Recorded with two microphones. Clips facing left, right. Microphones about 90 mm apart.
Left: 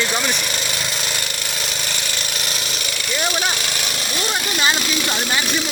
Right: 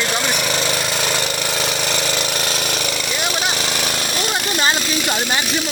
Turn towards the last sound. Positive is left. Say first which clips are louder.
# right 2 dB
turn(degrees=-15)  # may be behind; listen again after turning